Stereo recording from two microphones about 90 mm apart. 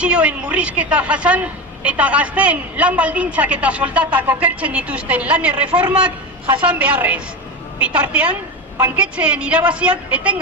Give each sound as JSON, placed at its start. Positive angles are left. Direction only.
{"t": 0.0, "sound": "a woman's voice", "side_deg": -15}